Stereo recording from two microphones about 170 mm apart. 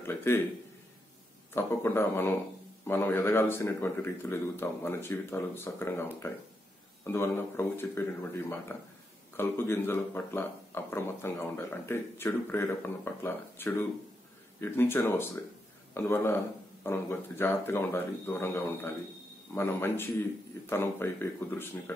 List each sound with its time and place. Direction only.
0.0 s a sound: 15° left (ahead or behind)
1.5 s speech: 15° left (ahead or behind)
9.4 s speech: 15° left (ahead or behind)